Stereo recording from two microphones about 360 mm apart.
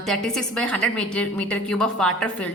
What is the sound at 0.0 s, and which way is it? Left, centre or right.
A woman's voice, centre.